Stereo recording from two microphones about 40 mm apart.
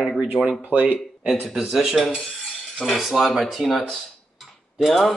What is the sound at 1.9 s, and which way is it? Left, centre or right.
Mechanisms, centre.